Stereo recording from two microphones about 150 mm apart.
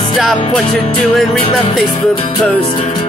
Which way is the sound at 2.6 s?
40° left (ahead or behind).